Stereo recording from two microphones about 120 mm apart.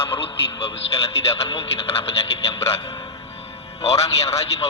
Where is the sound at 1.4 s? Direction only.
50° left (ahead or behind).